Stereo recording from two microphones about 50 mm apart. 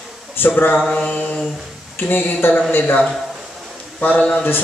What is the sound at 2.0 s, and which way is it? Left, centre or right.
Speech, left.